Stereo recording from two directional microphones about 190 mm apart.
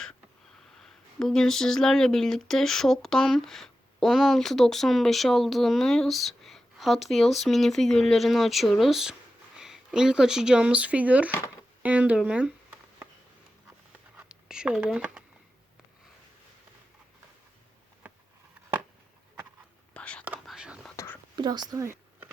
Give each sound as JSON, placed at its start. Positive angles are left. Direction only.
{"t": 0.8, "sound": "speech", "side_deg": 0}
{"t": 14.2, "sound": "a sound", "side_deg": -5}
{"t": 19.9, "sound": "whispering", "side_deg": 5}
{"t": 20.2, "sound": "whispering", "side_deg": -5}
{"t": 20.9, "sound": "whispering", "side_deg": 15}
{"t": 21.3, "sound": "a sound", "side_deg": -20}